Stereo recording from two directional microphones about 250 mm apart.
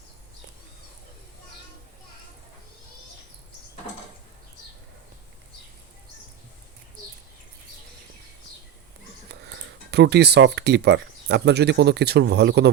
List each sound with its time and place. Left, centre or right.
9.3 s speech: right